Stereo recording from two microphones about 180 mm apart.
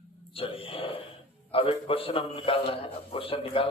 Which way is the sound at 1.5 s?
30° left (ahead or behind).